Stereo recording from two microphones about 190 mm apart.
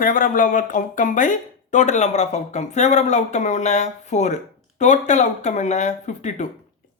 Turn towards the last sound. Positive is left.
turn(degrees=40)  # may be behind; listen again after turning